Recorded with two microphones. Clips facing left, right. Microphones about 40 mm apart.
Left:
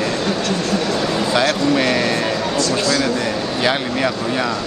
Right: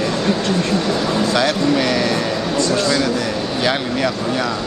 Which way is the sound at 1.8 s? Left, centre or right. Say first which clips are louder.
Even; centre.